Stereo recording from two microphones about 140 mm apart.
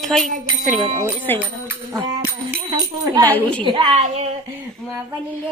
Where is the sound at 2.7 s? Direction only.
25° right (ahead or behind).